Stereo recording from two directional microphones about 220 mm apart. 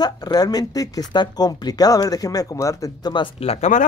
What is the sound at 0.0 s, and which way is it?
Speech, 20° left (ahead or behind).